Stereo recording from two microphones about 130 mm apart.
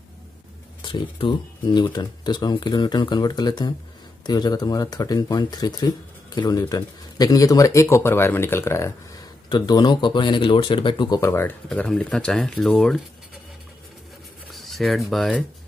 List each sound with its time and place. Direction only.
0.8 s speech: 40° left (ahead or behind); by 8.9 s 20° left (ahead or behind)
9.5 s speech: 35° left (ahead or behind)
11.1 s speech: 20° left (ahead or behind); by 13.0 s centre (ahead or behind)
14.5 s speech: centre (ahead or behind)